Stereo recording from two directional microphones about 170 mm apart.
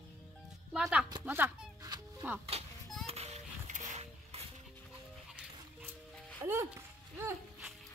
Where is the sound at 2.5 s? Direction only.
35° right (ahead or behind).